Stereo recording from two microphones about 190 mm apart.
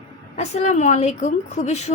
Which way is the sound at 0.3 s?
35° left (ahead or behind).